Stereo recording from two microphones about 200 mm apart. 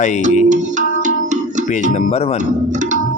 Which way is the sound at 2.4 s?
35° right (ahead or behind).